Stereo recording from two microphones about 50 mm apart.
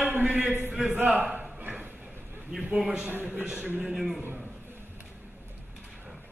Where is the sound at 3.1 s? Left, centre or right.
Right.